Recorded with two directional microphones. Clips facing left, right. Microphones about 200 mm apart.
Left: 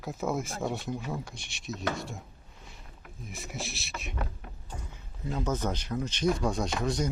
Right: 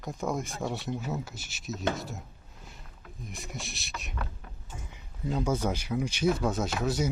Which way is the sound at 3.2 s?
Centre (ahead or behind).